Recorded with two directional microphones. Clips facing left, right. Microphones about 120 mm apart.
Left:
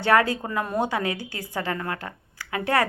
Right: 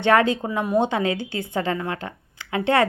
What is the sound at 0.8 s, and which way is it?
Speech, 25° right (ahead or behind).